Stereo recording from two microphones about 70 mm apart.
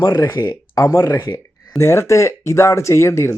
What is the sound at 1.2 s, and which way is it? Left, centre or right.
Speech, left.